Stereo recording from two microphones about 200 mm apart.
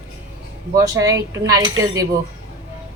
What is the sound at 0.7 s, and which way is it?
Speech, 15° right (ahead or behind).